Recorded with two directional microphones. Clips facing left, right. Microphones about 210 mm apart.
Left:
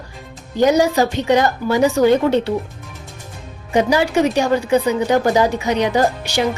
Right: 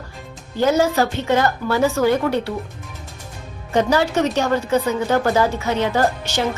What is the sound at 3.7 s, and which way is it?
A woman's voice, 10° left (ahead or behind).